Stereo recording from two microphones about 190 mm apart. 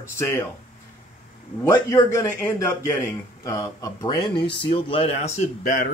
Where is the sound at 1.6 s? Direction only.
15° left (ahead or behind).